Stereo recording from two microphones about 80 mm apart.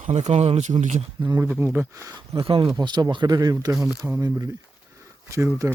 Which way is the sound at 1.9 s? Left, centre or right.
Right.